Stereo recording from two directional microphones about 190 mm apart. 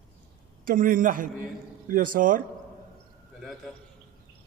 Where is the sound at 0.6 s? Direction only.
45° right (ahead or behind).